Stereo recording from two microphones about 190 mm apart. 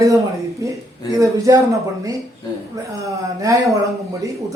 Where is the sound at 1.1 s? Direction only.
15° right (ahead or behind).